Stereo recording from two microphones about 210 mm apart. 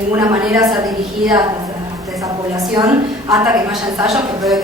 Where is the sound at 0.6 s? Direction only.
20° right (ahead or behind).